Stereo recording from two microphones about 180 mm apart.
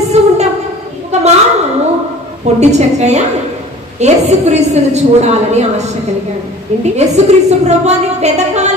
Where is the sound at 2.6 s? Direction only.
40° right (ahead or behind).